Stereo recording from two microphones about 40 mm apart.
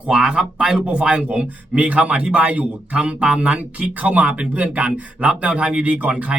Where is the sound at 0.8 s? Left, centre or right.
Right.